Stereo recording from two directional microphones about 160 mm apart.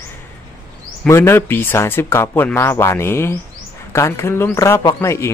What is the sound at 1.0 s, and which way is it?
Speech, 15° left (ahead or behind).